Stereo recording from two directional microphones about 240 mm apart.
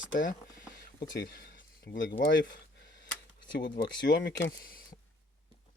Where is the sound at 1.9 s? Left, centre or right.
Left.